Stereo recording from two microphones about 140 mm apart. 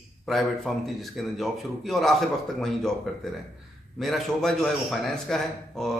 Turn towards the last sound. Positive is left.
turn(degrees=5)  # may be behind; listen again after turning